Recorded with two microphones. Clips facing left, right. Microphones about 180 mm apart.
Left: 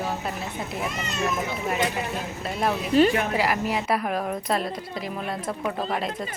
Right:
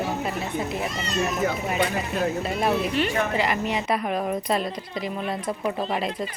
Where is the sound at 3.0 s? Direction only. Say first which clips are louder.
Left 7 dB; 40° left (ahead or behind).